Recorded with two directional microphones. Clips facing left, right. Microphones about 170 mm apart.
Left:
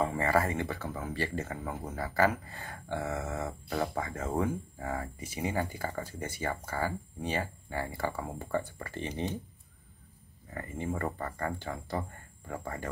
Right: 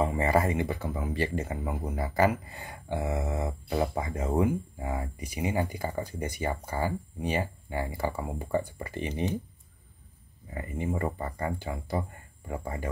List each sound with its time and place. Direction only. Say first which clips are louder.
0.0 s speech: right 3 dB; 15° right (ahead or behind)
10.5 s speech: right 3 dB; 15° right (ahead or behind)